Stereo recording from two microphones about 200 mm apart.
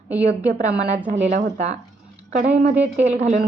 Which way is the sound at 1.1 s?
40° right (ahead or behind).